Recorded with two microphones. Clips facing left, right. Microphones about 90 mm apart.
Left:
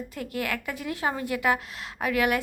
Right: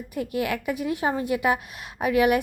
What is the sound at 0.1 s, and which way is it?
A woman's voice, 20° right (ahead or behind).